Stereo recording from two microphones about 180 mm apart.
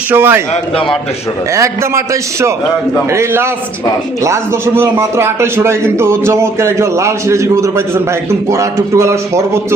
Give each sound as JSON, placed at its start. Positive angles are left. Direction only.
{"t": 0.1, "sound": "a man's voice", "side_deg": -10}
{"t": 1.5, "sound": "a man's voice", "side_deg": -15}